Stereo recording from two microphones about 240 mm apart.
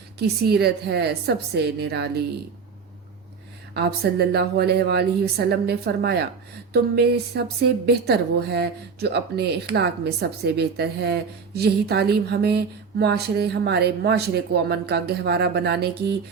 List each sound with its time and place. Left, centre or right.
0.2 s a woman's voice: right
3.8 s a woman's voice: right